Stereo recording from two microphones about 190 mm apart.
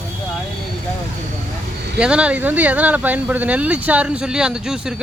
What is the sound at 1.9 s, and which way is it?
Speech, 5° right (ahead or behind).